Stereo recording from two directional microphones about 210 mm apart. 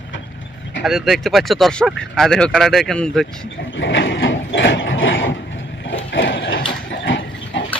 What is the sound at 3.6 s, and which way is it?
Mechanisms, 60° left (ahead or behind).